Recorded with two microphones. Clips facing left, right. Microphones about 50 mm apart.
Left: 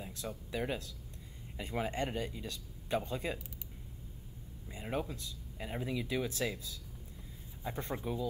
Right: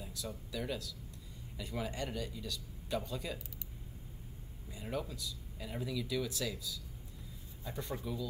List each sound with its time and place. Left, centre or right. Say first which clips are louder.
0.0 s a sound: left 2 dB; left
0.5 s speech: left 3 dB; left
4.6 s speech: left 2 dB; left
7.6 s speech: left 3 dB; left